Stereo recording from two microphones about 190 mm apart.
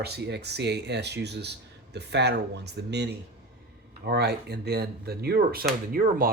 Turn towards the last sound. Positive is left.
turn(degrees=-50)  # may be behind; listen again after turning